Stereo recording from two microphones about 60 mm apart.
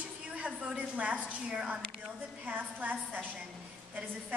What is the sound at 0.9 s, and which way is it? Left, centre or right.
A woman's voice, right.